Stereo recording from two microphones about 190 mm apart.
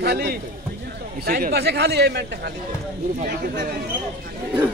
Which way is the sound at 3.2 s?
45° right (ahead or behind).